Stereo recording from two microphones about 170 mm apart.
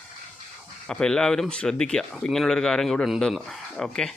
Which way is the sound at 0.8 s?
5° left (ahead or behind).